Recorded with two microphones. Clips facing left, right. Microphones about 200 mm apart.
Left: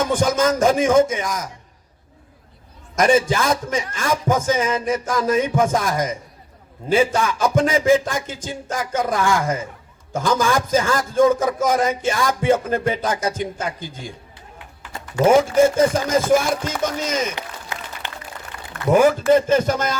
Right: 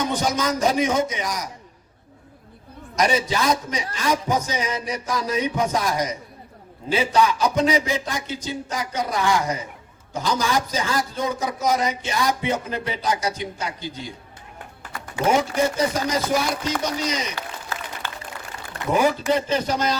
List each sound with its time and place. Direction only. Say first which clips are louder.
0.0 s a man's voice: left 5 dB; 50° left (ahead or behind)
2.9 s a man's voice: left 5 dB; 50° left (ahead or behind)
14.9 s a sound: left 1 dB; 25° left (ahead or behind)
15.4 s a man's voice: left 7 dB; 50° left (ahead or behind)
17.3 s applause: left 1 dB; 20° left (ahead or behind)
18.8 s a man's voice: left 7 dB; 20° right (ahead or behind)
19.3 s a man's voice: left 6 dB; 50° left (ahead or behind)